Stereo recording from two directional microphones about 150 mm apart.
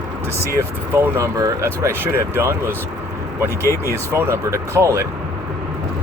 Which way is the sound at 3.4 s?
20° left (ahead or behind).